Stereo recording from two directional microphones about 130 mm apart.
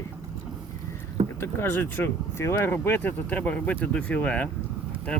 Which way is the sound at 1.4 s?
15° left (ahead or behind).